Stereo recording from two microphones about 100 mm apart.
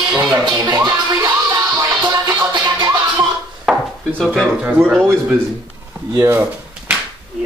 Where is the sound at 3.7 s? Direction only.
5° right (ahead or behind).